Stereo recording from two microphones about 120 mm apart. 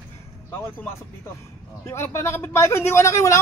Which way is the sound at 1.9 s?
20° left (ahead or behind).